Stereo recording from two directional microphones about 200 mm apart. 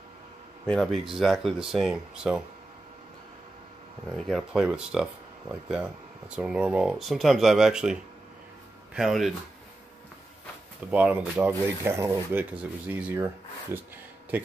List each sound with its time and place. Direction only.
0.7 s speech: centre (ahead or behind)
4.2 s speech: centre (ahead or behind)
10.9 s speech: 5° right (ahead or behind)